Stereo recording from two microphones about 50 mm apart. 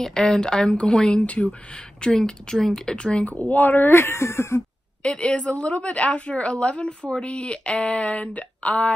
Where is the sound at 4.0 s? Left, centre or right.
Left.